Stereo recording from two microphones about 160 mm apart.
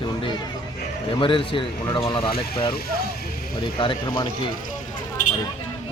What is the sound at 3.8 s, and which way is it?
Speech, 30° left (ahead or behind).